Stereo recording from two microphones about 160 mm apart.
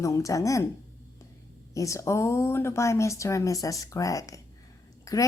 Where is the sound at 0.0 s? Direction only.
20° left (ahead or behind).